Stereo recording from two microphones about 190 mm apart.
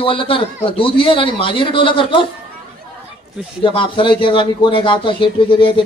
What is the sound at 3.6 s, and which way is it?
A man's voice, 25° left (ahead or behind).